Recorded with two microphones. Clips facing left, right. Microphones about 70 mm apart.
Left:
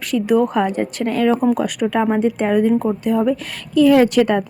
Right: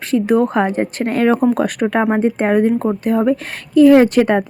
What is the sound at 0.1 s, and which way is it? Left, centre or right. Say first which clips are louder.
A woman's voice: right 2 dB; right.